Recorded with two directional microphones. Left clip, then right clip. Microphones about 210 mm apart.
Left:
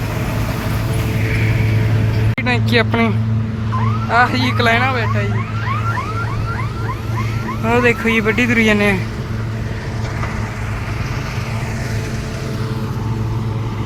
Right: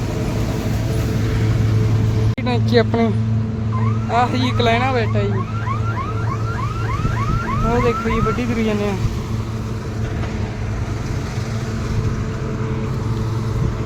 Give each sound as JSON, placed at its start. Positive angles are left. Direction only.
{"t": 2.4, "sound": "speech", "side_deg": 0}
{"t": 4.1, "sound": "speech", "side_deg": 0}
{"t": 4.9, "sound": "speech", "side_deg": -35}
{"t": 7.7, "sound": "speech", "side_deg": 5}